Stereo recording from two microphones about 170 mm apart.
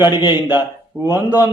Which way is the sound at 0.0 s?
25° left (ahead or behind).